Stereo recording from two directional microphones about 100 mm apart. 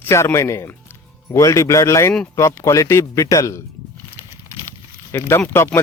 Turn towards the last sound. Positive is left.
turn(degrees=25)  # may be behind; listen again after turning